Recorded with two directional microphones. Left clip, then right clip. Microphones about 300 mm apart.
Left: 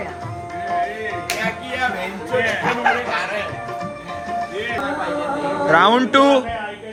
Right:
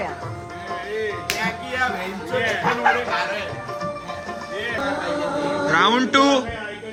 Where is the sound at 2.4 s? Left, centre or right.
Right.